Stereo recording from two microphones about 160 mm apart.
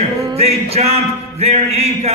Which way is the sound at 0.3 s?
40° right (ahead or behind).